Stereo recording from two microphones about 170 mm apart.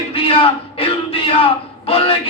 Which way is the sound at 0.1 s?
35° left (ahead or behind).